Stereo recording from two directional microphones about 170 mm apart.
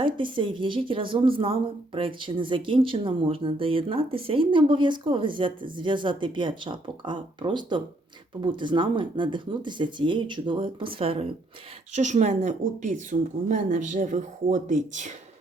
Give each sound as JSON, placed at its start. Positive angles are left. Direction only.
{"t": 0.0, "sound": "speech", "side_deg": -30}